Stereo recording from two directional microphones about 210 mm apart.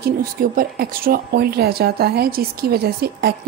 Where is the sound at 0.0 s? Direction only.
45° right (ahead or behind).